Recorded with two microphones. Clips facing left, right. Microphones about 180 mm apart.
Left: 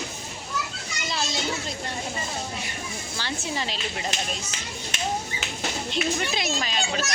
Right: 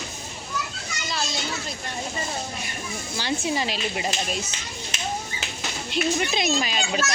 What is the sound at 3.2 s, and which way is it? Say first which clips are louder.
A child's voice: right 5 dB; 15° right (ahead or behind).